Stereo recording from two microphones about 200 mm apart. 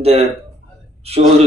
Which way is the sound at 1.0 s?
30° right (ahead or behind).